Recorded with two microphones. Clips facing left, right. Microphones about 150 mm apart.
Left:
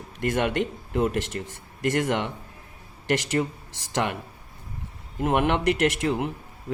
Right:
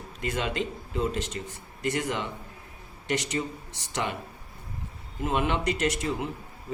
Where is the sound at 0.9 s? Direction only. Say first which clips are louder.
Left 5 dB; 65° left (ahead or behind).